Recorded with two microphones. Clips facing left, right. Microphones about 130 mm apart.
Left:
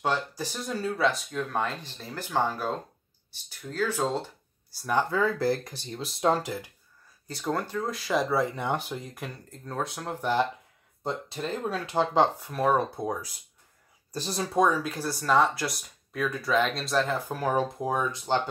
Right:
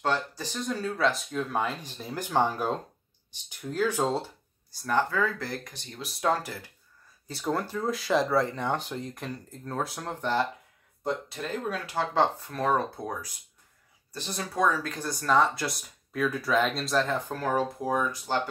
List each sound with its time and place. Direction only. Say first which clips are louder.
0.0 s speech: even; 10° left (ahead or behind); by 4.3 s 15° right (ahead or behind)
4.6 s speech: even; 15° left (ahead or behind)
5.1 s speech: left 4 dB; 30° left (ahead or behind)
7.2 s speech: even; centre (ahead or behind)
11.1 s speech: even; 30° left (ahead or behind)
14.1 s speech: left 4 dB; 35° left (ahead or behind)
14.5 s speech: left 2 dB; 15° left (ahead or behind)